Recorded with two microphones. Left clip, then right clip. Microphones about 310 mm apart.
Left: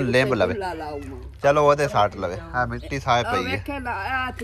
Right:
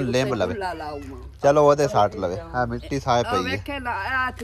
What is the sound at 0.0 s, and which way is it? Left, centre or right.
Speech, centre.